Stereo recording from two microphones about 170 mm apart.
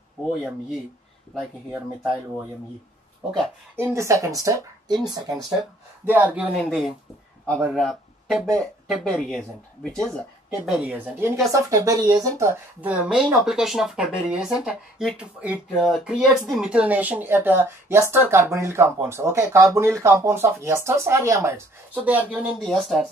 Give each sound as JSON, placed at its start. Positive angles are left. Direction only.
{"t": 0.4, "sound": "speech", "side_deg": 0}
{"t": 3.7, "sound": "speech", "side_deg": -15}
{"t": 6.0, "sound": "speech", "side_deg": -10}